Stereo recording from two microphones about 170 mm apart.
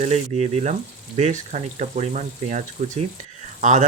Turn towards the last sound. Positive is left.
turn(degrees=-45)  # may be behind; listen again after turning